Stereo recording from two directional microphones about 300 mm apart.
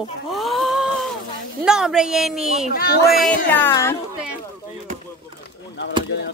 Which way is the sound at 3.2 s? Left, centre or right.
Centre.